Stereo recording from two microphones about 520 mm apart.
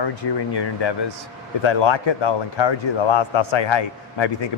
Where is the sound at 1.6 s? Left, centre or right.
Left.